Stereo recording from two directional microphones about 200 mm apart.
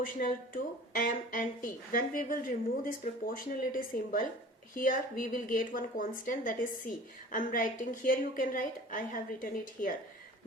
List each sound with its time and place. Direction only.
0.0 s a woman's voice: 45° left (ahead or behind)